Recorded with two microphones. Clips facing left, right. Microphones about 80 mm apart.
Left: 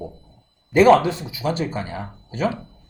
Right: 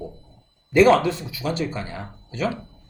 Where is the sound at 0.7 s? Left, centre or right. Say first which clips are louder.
Left 2 dB; left.